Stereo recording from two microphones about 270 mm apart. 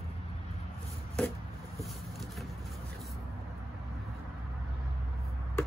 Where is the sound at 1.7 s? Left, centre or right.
Centre.